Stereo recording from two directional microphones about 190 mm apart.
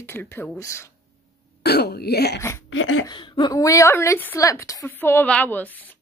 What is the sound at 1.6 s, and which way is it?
Speech, 60° left (ahead or behind).